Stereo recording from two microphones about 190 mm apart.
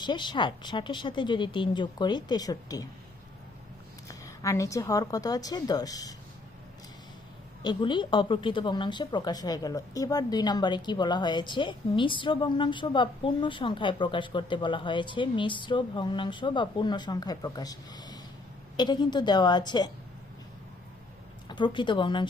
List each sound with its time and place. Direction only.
0.0 s speech: 25° left (ahead or behind)
4.1 s speech: 15° left (ahead or behind)
7.6 s speech: 25° left (ahead or behind)
21.5 s speech: 25° left (ahead or behind)